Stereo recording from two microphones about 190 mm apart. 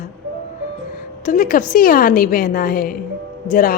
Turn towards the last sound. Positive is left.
turn(degrees=45)  # may be behind; listen again after turning